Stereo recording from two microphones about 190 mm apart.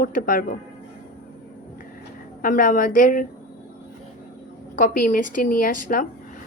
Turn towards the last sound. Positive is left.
turn(degrees=45)  # may be behind; listen again after turning